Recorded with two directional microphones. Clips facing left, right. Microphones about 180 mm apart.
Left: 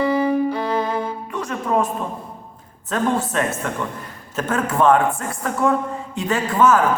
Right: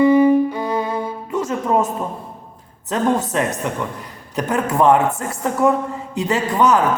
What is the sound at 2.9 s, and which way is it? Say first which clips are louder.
A man's voice: right 2 dB; 20° right (ahead or behind).